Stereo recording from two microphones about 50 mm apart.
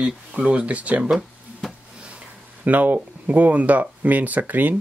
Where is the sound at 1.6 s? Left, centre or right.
Centre.